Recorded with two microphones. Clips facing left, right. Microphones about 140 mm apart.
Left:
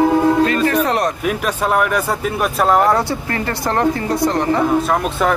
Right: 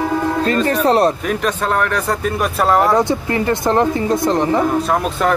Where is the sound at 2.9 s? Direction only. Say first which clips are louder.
Right 4 dB; 20° right (ahead or behind).